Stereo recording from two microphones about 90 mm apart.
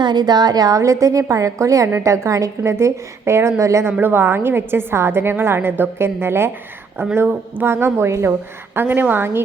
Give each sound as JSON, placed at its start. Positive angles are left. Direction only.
{"t": 0.0, "sound": "a woman's voice", "side_deg": -55}